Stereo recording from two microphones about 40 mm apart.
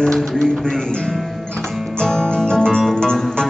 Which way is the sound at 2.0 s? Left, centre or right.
Centre.